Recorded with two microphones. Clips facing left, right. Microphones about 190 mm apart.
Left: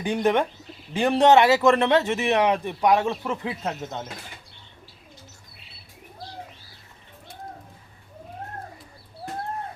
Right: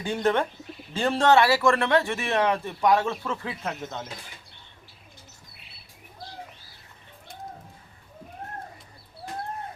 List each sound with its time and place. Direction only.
0.0 s a man's voice: 15° left (ahead or behind)